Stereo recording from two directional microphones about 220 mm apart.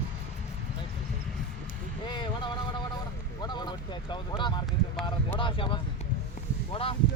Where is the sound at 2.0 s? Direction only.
20° left (ahead or behind).